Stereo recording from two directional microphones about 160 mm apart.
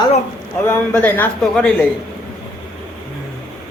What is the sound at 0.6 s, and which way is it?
A man's voice, 10° left (ahead or behind).